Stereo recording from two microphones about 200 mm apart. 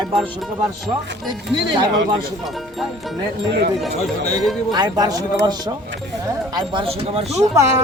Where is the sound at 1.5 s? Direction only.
25° right (ahead or behind).